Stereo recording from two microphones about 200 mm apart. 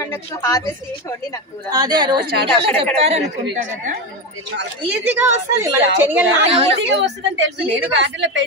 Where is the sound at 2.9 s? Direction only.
30° right (ahead or behind).